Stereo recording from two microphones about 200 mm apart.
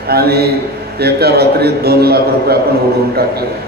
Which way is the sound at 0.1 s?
50° right (ahead or behind).